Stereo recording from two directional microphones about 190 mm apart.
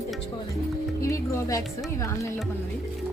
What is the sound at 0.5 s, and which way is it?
Music, 15° left (ahead or behind).